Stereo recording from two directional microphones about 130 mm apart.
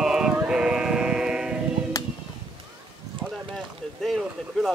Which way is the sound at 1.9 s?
30° left (ahead or behind).